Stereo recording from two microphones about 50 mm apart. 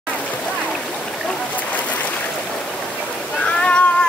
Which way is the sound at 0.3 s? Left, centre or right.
Left.